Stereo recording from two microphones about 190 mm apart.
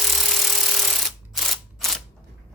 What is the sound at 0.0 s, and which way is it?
Ratchet, centre (ahead or behind).